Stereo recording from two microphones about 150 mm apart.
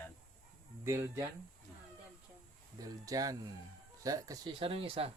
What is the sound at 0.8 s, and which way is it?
Speech, 20° right (ahead or behind).